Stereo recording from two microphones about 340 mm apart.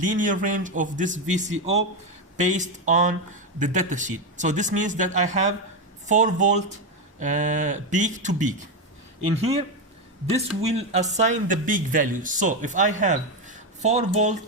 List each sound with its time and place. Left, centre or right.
0.0 s speech: right